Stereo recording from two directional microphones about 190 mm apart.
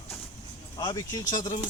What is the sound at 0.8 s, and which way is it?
Speech, 20° left (ahead or behind).